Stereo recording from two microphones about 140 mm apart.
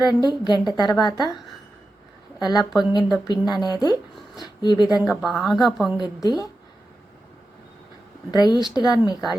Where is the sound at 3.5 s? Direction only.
30° left (ahead or behind).